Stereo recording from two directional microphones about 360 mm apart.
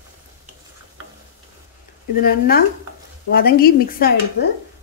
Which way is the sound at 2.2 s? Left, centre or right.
Left.